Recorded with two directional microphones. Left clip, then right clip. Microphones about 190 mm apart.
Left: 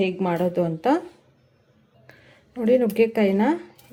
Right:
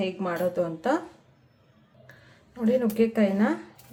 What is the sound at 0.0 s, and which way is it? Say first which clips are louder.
A woman's voice: left 4 dB; 45° left (ahead or behind).